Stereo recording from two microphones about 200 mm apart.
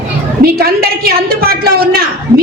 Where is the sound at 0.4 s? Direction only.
50° right (ahead or behind).